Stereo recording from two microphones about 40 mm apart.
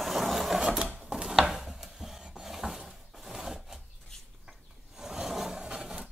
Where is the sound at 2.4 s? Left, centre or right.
Centre.